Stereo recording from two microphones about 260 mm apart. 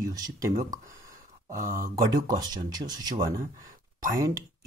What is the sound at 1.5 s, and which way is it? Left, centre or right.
Speech, right.